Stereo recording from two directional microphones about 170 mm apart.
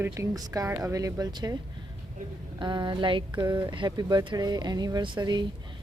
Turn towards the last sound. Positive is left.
turn(degrees=-25)  # may be behind; listen again after turning